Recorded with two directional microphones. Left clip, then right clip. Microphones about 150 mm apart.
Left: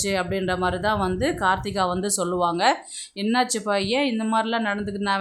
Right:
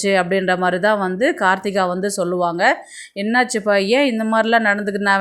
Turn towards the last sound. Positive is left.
turn(degrees=-25)  # may be behind; listen again after turning